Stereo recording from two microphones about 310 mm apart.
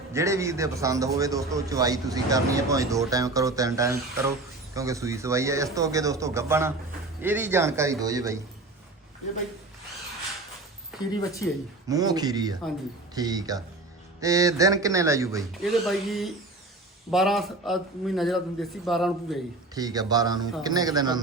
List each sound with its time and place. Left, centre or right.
0.1 s a man's voice: centre
11.9 s a man's voice: centre
19.7 s a man's voice: centre